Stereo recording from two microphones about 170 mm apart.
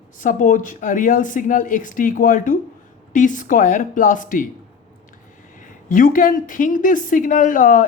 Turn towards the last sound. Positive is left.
turn(degrees=50)  # may be behind; listen again after turning